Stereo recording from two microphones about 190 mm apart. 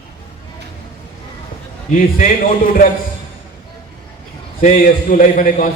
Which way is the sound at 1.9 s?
45° left (ahead or behind).